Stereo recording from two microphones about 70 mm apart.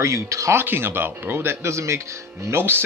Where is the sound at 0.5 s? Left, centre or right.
Right.